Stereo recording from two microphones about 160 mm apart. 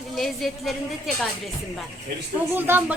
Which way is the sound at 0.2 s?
Centre (ahead or behind).